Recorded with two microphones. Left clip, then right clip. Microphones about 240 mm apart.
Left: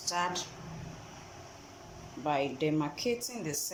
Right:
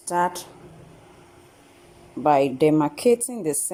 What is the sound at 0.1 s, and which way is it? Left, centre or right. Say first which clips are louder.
Speech: right 9 dB; right.